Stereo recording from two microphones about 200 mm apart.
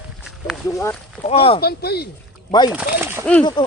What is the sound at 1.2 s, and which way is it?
Speech, 30° left (ahead or behind).